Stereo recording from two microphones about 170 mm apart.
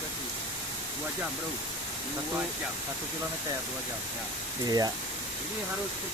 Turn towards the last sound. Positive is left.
turn(degrees=-20)  # may be behind; listen again after turning